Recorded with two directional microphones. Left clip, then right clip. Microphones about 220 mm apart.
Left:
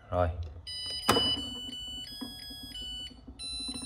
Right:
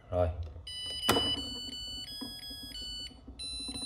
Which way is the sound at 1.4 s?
Centre (ahead or behind).